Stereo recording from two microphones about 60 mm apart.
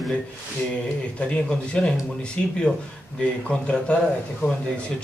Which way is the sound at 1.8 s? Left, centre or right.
Centre.